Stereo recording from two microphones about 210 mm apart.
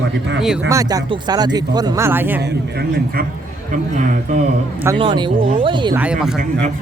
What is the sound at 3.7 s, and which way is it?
Speech, 35° right (ahead or behind).